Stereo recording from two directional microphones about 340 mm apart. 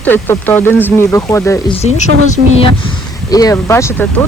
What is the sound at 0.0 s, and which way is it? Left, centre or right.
A woman's voice, centre.